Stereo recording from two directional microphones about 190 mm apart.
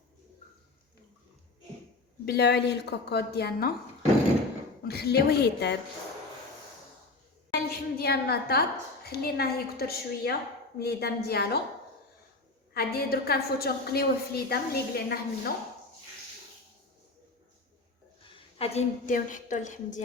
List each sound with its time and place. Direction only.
2.2 s a woman's voice: 60° left (ahead or behind)
4.8 s a woman's voice: 55° left (ahead or behind)
7.5 s a sound: 55° left (ahead or behind)
9.0 s a woman's voice: 55° left (ahead or behind)
12.7 s a woman's voice: 55° left (ahead or behind)
18.2 s a woman's voice: 30° left (ahead or behind)